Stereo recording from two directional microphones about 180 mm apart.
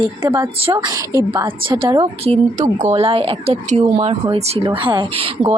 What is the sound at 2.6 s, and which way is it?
A woman's voice, 40° right (ahead or behind).